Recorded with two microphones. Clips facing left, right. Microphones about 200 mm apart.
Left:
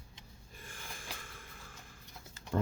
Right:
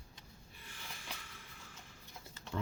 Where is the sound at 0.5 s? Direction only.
50° left (ahead or behind).